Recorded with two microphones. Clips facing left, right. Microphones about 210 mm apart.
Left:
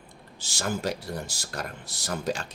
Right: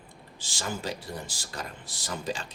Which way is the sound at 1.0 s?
40° left (ahead or behind).